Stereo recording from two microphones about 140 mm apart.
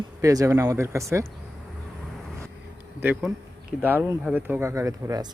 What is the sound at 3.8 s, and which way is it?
Speech, 15° right (ahead or behind).